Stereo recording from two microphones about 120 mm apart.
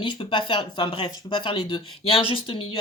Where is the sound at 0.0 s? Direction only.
45° left (ahead or behind).